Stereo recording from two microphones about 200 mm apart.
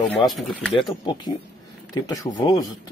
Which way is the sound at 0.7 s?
25° left (ahead or behind).